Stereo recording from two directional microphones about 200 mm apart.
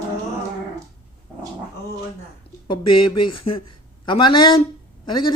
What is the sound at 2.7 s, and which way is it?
Speech, 25° left (ahead or behind).